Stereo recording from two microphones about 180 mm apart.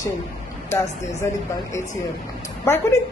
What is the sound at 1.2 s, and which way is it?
Speech, 15° left (ahead or behind).